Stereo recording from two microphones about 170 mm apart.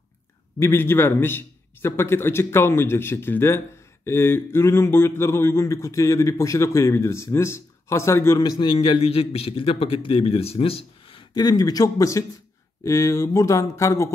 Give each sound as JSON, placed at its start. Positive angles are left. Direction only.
{"t": 0.6, "sound": "a man's voice", "side_deg": 15}